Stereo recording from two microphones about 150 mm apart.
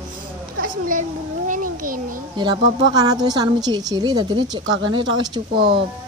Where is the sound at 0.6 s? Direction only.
65° right (ahead or behind).